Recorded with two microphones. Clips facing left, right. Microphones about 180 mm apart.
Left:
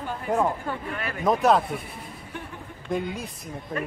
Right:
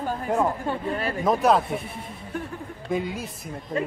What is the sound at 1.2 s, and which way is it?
Speech, centre (ahead or behind).